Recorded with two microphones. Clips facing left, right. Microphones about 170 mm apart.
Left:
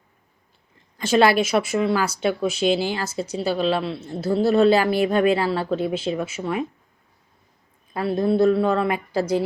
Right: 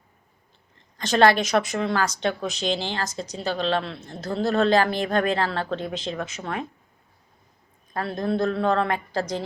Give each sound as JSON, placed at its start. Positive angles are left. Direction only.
{"t": 0.9, "sound": "speech", "side_deg": 5}
{"t": 8.2, "sound": "speech", "side_deg": 5}